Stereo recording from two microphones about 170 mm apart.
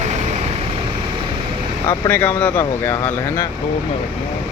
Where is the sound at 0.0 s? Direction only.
40° right (ahead or behind).